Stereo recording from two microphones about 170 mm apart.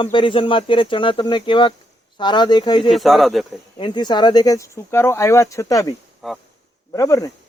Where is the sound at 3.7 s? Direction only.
25° left (ahead or behind).